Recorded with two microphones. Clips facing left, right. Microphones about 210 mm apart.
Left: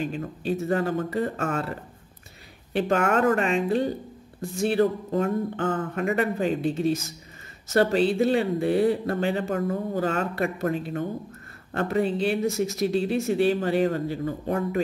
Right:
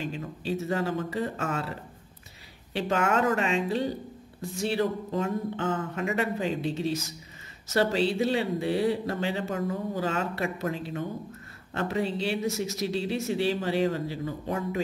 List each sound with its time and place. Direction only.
0.0 s speech: 50° left (ahead or behind)